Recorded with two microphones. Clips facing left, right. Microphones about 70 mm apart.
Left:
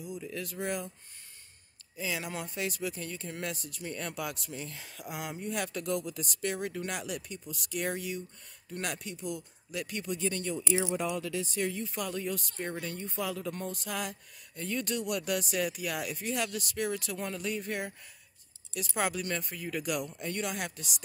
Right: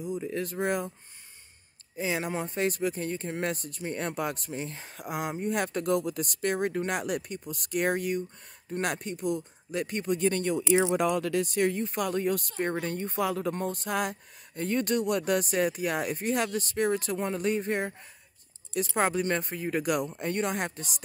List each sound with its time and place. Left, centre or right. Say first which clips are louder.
0.0 s speech: right 7 dB; right
2.0 s speech: right 6 dB; right